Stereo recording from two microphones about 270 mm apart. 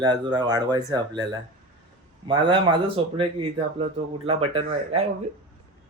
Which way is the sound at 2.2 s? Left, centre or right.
Centre.